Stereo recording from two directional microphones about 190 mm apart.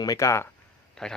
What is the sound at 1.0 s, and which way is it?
Speech, 5° left (ahead or behind).